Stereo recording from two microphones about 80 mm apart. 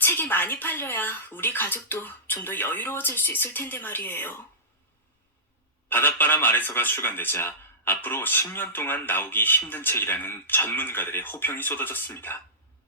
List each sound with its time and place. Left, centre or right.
0.0 s speech: left
5.9 s speech: left